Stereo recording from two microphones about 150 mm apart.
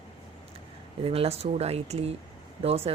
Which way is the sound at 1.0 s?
40° right (ahead or behind).